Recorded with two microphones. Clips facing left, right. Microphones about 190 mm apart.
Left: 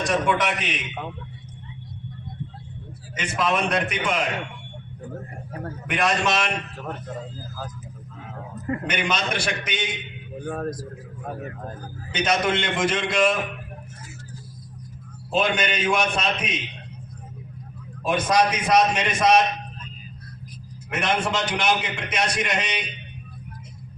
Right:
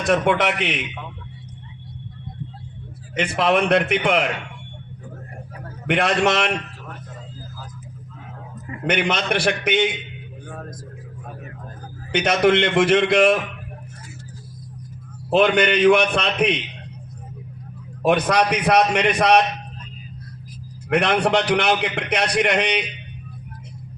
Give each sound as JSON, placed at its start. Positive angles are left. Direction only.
{"t": 0.0, "sound": "a man's voice", "side_deg": -60}
{"t": 3.2, "sound": "a man's voice", "side_deg": -60}
{"t": 5.9, "sound": "a man's voice", "side_deg": -60}
{"t": 8.9, "sound": "a man's voice", "side_deg": -60}
{"t": 10.4, "sound": "speech", "side_deg": 55}
{"t": 12.1, "sound": "a man's voice", "side_deg": -60}
{"t": 15.3, "sound": "a man's voice", "side_deg": -65}
{"t": 18.0, "sound": "a man's voice", "side_deg": -65}
{"t": 20.9, "sound": "a man's voice", "side_deg": -65}